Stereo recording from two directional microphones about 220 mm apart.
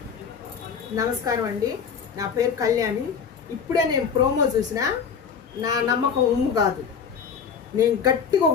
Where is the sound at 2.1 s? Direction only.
15° right (ahead or behind).